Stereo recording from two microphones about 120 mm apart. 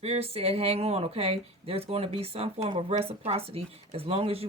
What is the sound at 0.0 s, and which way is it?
Speech, 55° right (ahead or behind).